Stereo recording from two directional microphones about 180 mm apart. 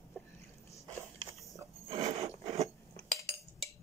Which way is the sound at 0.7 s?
15° left (ahead or behind).